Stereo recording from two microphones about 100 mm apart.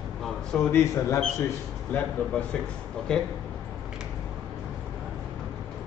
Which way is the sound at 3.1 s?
10° left (ahead or behind).